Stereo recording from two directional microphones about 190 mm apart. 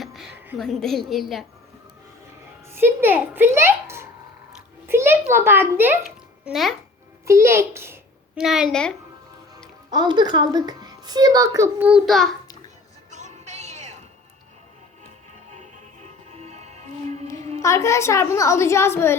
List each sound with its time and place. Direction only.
0.0 s a woman's voice: centre (ahead or behind)
2.7 s a woman's voice: 10° right (ahead or behind)
4.9 s a sound: 10° right (ahead or behind)
5.3 s a child's voice: 10° right (ahead or behind)
6.4 s a child's voice: centre (ahead or behind)
7.3 s a child's voice: 15° right (ahead or behind)
8.4 s a woman's voice: centre (ahead or behind)
9.9 s a woman's voice: 25° right (ahead or behind); by 12.4 s centre (ahead or behind)
13.1 s music: 40° right (ahead or behind)
15.5 s music: 40° right (ahead or behind)
17.6 s a child's voice: 15° left (ahead or behind)